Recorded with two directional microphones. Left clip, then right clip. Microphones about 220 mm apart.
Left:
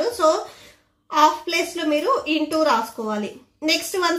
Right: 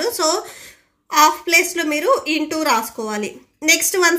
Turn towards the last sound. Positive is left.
turn(degrees=-30)  # may be behind; listen again after turning